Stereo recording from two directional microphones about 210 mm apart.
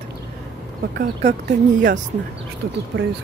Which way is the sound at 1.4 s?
55° right (ahead or behind).